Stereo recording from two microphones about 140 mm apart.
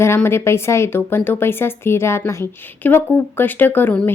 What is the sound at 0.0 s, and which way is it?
A woman's voice, 20° left (ahead or behind).